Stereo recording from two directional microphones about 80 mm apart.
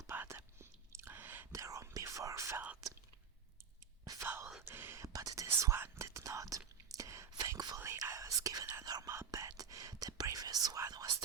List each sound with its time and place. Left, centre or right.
0.1 s whispering: right
1.5 s whispering: right
4.0 s whispering: right
4.6 s whispering: right
5.0 s whispering: right